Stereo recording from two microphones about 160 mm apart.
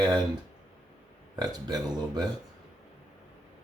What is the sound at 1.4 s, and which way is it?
Speech, 25° right (ahead or behind).